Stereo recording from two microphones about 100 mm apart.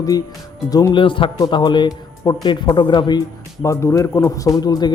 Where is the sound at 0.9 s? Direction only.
55° left (ahead or behind).